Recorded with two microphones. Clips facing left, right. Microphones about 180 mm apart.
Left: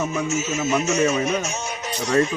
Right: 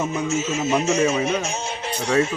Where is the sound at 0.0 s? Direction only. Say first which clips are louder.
Right 1 dB; 30° right (ahead or behind).